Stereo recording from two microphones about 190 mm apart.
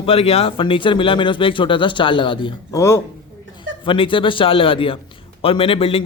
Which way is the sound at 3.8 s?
25° left (ahead or behind).